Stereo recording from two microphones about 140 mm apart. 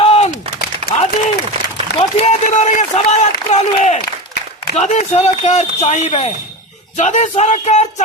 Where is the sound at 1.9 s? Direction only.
50° left (ahead or behind).